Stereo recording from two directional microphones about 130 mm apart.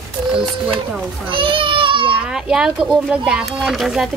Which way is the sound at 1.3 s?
40° right (ahead or behind).